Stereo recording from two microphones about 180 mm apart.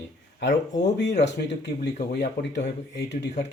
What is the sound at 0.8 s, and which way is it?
Speech, 70° left (ahead or behind).